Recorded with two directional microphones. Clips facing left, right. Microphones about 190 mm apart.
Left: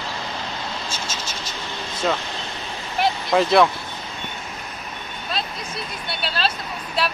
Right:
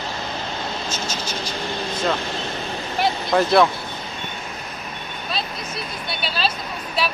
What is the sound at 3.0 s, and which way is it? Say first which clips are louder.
Vehicle: even; centre (ahead or behind).